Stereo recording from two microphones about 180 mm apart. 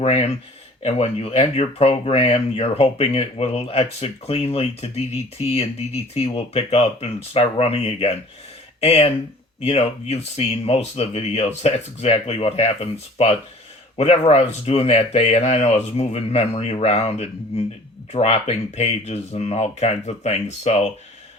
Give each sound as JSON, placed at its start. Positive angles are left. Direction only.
{"t": 0.0, "sound": "speech", "side_deg": 35}